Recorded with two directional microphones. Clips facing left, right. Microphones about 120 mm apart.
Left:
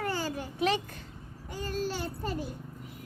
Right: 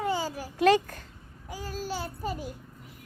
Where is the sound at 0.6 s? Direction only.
45° right (ahead or behind).